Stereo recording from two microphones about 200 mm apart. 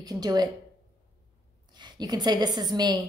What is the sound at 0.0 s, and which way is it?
Speech, 20° right (ahead or behind).